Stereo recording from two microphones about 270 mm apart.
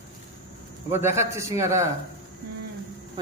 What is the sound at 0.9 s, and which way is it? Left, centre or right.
Speech, centre.